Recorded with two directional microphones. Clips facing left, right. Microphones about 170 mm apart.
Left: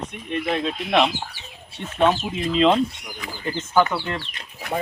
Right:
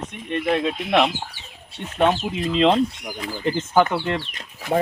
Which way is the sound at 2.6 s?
25° right (ahead or behind).